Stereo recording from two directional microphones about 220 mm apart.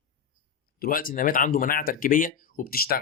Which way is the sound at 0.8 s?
40° left (ahead or behind).